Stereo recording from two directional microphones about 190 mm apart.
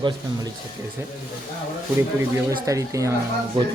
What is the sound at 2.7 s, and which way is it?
Speech, 15° right (ahead or behind).